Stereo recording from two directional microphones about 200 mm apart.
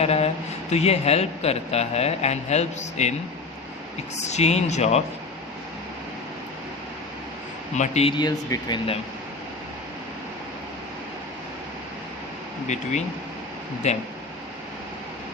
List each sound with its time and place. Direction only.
0.0 s a sound: 30° left (ahead or behind)
0.7 s a man's voice: 30° left (ahead or behind)
4.3 s a man's voice: 35° left (ahead or behind)
7.8 s speech: 30° left (ahead or behind)
12.6 s a man's voice: 35° left (ahead or behind)